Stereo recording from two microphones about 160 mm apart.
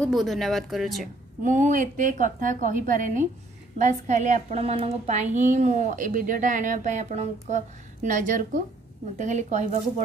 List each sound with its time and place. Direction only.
0.0 s a woman's voice: centre (ahead or behind)
1.4 s a woman's voice: 55° right (ahead or behind)